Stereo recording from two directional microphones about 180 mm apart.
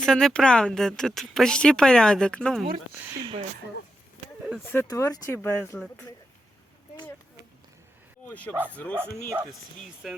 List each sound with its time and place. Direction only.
0.0 s speech: 5° left (ahead or behind)
3.2 s speech: 25° right (ahead or behind)
4.6 s speech: 10° left (ahead or behind)
8.3 s speech: 10° left (ahead or behind)
10.0 s speech: centre (ahead or behind)